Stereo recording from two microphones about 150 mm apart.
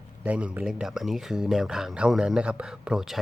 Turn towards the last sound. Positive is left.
turn(degrees=-5)  # may be behind; listen again after turning